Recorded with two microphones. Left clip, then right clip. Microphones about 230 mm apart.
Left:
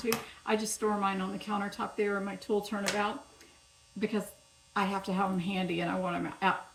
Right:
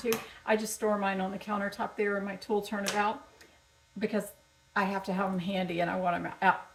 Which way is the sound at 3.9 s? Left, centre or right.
Centre.